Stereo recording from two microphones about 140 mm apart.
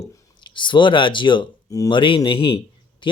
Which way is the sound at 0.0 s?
25° left (ahead or behind).